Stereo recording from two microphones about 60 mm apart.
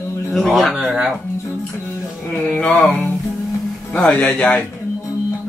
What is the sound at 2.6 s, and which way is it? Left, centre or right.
Speech, centre.